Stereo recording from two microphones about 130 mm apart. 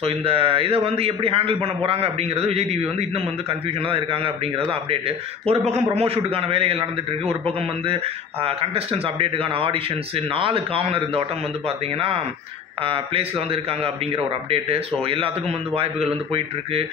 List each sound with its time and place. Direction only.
0.0 s a man's voice: 45° right (ahead or behind)
3.9 s a man's voice: 40° right (ahead or behind)
7.8 s a man's voice: 45° right (ahead or behind)
12.8 s a man's voice: 45° right (ahead or behind)